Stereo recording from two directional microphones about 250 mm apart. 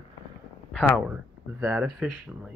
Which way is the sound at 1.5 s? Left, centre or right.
Centre.